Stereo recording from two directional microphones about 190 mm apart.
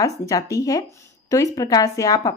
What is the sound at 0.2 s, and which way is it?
Speech, 20° left (ahead or behind).